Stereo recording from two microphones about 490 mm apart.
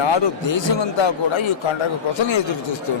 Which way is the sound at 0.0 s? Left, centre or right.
Left.